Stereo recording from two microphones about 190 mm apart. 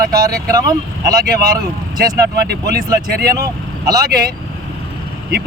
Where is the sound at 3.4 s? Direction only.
20° right (ahead or behind).